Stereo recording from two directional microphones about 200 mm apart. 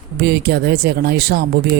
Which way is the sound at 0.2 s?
50° right (ahead or behind).